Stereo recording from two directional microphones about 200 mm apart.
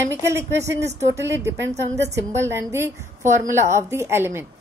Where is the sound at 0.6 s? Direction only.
60° right (ahead or behind).